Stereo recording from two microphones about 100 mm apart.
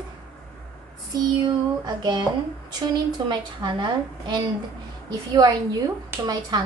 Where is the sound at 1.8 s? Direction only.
45° right (ahead or behind).